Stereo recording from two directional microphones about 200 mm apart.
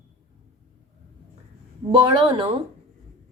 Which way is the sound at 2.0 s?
25° right (ahead or behind).